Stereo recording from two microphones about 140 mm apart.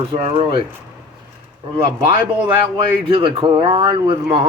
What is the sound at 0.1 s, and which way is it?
Speech, 45° right (ahead or behind).